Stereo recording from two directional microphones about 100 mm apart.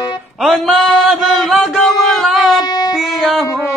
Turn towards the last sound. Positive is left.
turn(degrees=0)  # may be behind; listen again after turning